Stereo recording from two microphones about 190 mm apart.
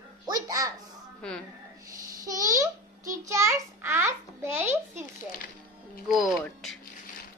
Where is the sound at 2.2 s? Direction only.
15° right (ahead or behind).